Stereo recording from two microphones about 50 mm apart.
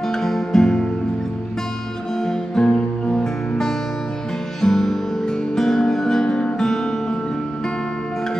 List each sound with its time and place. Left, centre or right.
0.1 s music: centre
2.2 s music: centre
4.6 s music: centre